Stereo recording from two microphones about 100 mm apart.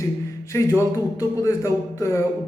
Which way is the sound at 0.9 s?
30° left (ahead or behind).